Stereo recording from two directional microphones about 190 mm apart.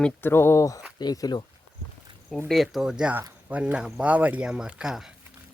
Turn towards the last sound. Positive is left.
turn(degrees=-5)  # may be behind; listen again after turning